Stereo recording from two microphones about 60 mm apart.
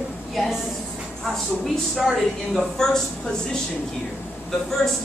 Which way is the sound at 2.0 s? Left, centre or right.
Centre.